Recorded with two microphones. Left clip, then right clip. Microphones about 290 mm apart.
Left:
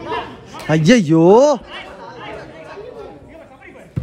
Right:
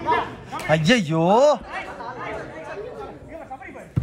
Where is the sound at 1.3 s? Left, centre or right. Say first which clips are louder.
Left 5 dB; left.